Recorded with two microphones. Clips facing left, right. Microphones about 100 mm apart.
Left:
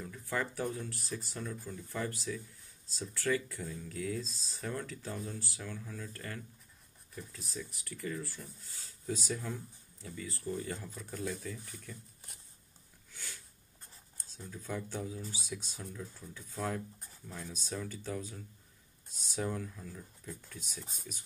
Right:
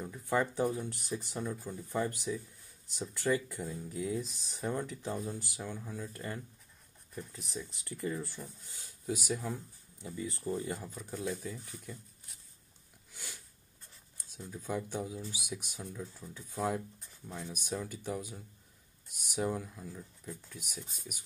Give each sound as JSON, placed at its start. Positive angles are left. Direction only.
{"t": 0.0, "sound": "speech", "side_deg": -20}
{"t": 13.1, "sound": "a sound", "side_deg": -15}
{"t": 14.1, "sound": "speech", "side_deg": -15}